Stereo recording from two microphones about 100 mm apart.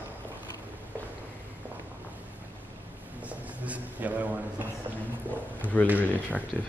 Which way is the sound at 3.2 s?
15° right (ahead or behind).